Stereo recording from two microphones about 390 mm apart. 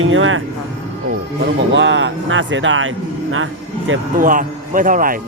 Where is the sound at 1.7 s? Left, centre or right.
Right.